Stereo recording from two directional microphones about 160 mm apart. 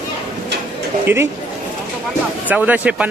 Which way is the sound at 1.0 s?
15° right (ahead or behind).